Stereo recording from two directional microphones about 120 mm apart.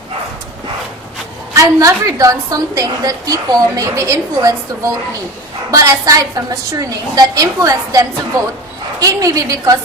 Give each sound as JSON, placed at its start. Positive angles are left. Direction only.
{"t": 1.5, "sound": "a woman's voice", "side_deg": -25}
{"t": 5.7, "sound": "a woman's voice", "side_deg": -30}